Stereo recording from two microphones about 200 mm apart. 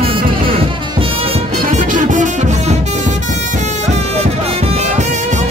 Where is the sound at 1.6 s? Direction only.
40° right (ahead or behind).